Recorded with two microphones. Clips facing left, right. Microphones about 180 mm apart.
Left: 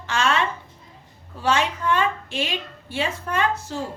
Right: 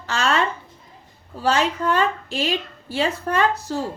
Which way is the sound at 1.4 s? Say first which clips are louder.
Right 2 dB; 40° right (ahead or behind).